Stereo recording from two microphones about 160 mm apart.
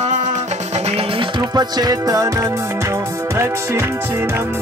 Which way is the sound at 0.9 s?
30° right (ahead or behind).